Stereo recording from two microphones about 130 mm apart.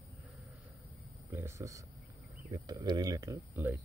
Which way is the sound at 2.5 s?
30° right (ahead or behind).